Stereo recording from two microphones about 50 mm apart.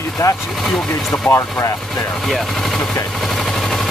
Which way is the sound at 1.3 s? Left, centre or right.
Left.